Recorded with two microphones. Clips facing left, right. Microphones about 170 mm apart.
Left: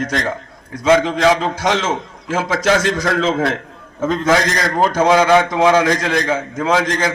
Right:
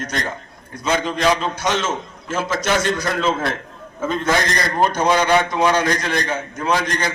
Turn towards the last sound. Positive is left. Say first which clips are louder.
# left 4 dB
turn(degrees=90)